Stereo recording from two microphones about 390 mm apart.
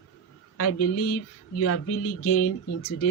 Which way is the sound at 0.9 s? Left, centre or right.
Left.